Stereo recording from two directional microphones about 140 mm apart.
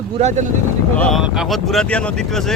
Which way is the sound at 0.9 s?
5° left (ahead or behind).